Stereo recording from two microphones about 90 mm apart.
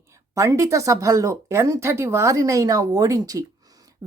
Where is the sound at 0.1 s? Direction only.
35° right (ahead or behind).